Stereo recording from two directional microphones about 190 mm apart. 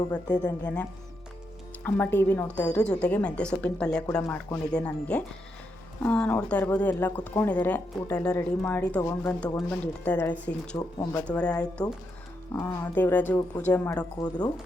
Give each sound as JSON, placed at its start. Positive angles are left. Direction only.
{"t": 0.6, "sound": "speech", "side_deg": 10}
{"t": 10.8, "sound": "speech", "side_deg": 20}
{"t": 11.3, "sound": "speech", "side_deg": 5}